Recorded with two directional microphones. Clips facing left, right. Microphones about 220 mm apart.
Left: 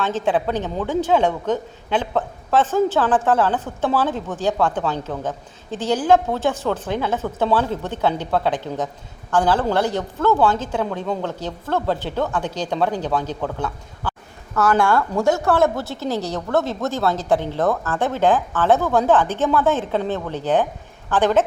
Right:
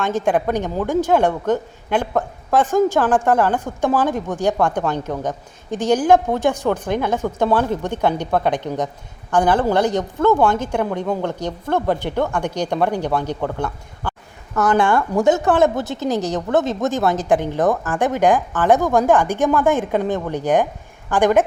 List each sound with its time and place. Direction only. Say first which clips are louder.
0.0 s a woman's voice: right 2 dB; 10° right (ahead or behind)